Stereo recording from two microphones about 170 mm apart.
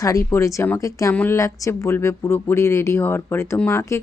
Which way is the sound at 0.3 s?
15° left (ahead or behind).